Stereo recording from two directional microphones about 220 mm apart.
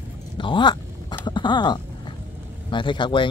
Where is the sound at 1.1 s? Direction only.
20° left (ahead or behind).